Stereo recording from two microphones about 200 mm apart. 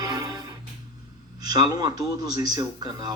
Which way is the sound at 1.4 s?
20° right (ahead or behind).